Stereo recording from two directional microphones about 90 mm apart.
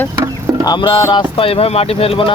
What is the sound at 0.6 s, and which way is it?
Music, 55° left (ahead or behind).